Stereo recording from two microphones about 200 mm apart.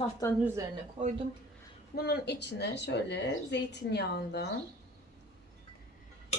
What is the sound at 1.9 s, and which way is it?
Speech, 50° left (ahead or behind).